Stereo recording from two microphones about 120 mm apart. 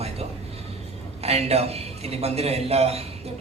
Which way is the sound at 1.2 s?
60° right (ahead or behind).